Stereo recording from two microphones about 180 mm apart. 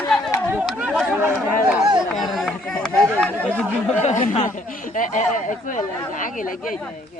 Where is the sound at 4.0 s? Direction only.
45° left (ahead or behind).